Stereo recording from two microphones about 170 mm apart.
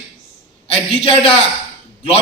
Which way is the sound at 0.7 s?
35° left (ahead or behind).